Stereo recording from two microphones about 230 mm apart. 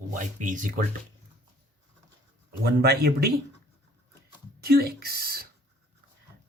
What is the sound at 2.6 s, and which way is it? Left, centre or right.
Speech, right.